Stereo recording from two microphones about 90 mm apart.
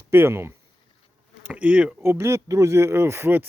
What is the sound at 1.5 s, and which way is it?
Speech, 15° right (ahead or behind).